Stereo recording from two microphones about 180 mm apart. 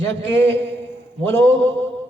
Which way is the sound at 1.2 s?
10° left (ahead or behind).